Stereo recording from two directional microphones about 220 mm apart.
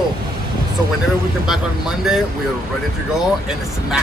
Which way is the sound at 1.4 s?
Centre (ahead or behind).